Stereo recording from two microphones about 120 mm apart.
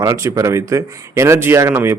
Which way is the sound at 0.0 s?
25° right (ahead or behind).